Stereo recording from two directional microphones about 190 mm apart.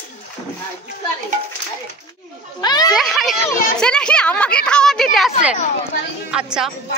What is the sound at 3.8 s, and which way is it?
A woman's voice, 5° left (ahead or behind).